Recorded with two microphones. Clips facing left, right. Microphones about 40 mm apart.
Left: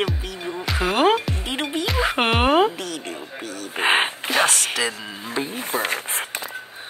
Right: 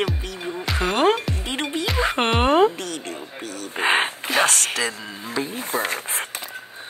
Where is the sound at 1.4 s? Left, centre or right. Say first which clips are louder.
Even; centre.